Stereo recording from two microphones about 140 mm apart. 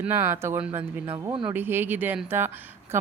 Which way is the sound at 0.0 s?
15° right (ahead or behind).